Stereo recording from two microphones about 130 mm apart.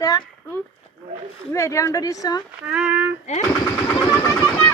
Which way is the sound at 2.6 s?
10° right (ahead or behind).